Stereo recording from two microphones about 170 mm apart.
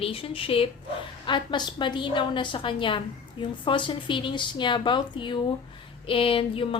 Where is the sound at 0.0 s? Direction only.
35° left (ahead or behind).